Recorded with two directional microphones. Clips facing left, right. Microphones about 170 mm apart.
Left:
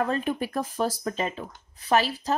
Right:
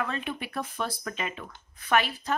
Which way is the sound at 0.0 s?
40° left (ahead or behind).